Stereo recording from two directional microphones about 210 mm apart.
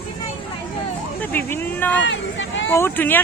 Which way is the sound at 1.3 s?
10° left (ahead or behind).